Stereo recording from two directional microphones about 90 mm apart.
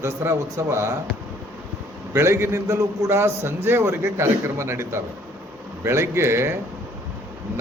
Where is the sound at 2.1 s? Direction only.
30° right (ahead or behind).